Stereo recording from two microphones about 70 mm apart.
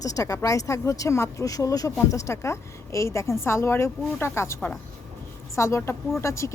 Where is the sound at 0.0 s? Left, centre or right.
Left.